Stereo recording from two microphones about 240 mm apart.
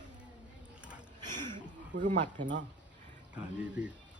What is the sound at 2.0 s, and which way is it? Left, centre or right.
Speech, right.